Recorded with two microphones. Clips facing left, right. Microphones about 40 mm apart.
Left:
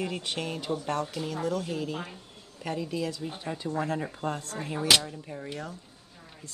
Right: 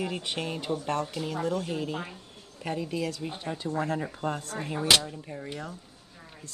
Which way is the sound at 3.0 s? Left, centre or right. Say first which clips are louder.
Even; right.